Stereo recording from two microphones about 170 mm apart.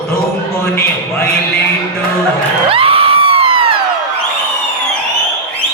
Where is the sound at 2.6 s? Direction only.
35° right (ahead or behind).